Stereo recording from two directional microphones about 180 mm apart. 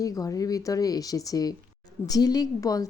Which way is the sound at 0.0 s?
20° left (ahead or behind).